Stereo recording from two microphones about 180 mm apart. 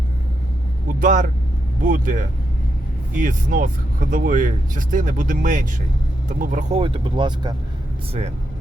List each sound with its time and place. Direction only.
0.9 s vehicle: 45° right (ahead or behind)
1.9 s speech: 45° right (ahead or behind)
6.7 s speech: 30° right (ahead or behind)